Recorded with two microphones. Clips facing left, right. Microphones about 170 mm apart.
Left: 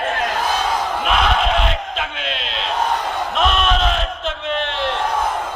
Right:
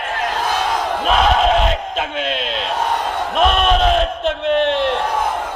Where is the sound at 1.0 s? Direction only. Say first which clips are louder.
Right 5 dB; 40° right (ahead or behind).